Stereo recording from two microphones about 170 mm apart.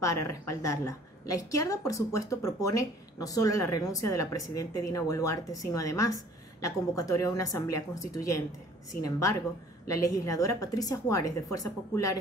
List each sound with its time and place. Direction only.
0.0 s a woman's voice: 20° left (ahead or behind)